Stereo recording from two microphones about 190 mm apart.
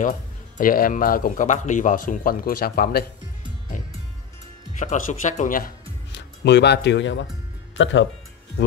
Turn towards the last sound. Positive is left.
turn(degrees=85)